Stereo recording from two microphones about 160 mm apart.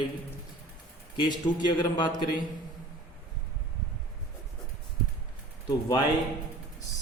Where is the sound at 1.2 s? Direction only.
30° left (ahead or behind).